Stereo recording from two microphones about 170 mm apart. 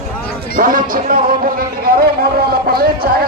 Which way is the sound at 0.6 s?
55° right (ahead or behind).